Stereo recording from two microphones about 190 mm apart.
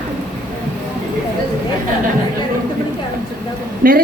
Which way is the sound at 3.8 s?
50° right (ahead or behind).